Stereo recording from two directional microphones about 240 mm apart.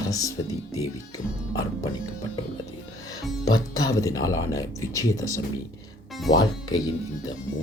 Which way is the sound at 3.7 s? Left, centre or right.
Centre.